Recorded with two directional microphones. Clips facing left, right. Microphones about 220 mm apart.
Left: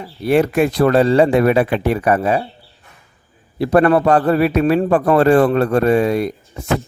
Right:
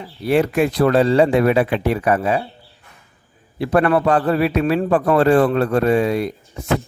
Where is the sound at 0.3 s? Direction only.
50° left (ahead or behind).